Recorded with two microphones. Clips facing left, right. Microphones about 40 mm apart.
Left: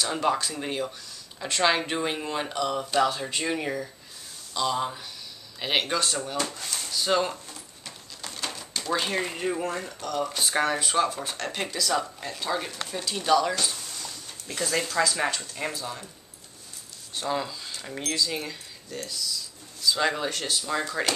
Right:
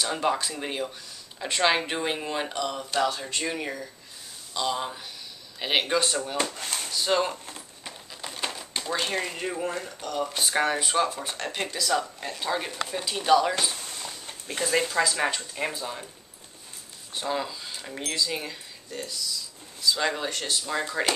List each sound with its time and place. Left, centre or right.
0.0 s speech: centre
6.5 s speech: right
6.9 s speech: centre
7.4 s a sound: right
8.9 s speech: centre
13.8 s a sound: right
14.6 s speech: centre
17.1 s speech: centre